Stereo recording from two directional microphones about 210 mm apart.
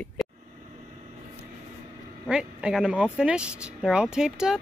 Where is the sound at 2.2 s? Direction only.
5° right (ahead or behind).